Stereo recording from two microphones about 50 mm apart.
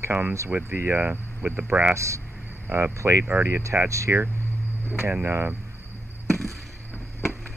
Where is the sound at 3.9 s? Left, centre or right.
Right.